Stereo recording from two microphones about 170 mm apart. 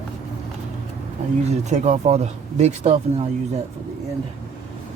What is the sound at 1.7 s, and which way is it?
Speech, 45° right (ahead or behind).